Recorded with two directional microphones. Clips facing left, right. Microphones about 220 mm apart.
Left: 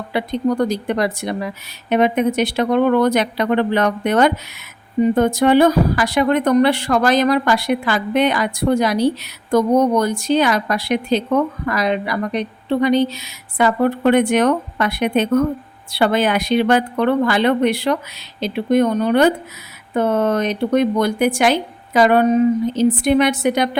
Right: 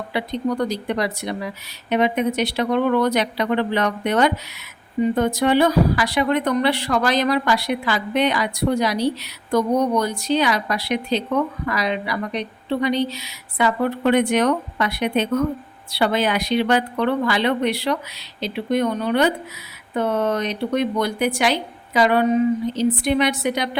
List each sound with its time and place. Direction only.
0.1 s a woman's voice: 50° left (ahead or behind)